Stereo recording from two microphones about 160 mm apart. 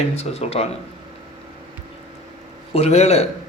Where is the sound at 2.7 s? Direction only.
40° left (ahead or behind).